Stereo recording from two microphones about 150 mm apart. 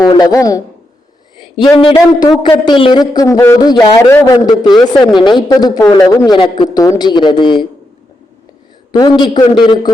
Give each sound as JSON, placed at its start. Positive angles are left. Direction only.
{"t": 0.2, "sound": "a man's voice", "side_deg": 25}
{"t": 8.9, "sound": "speech", "side_deg": 30}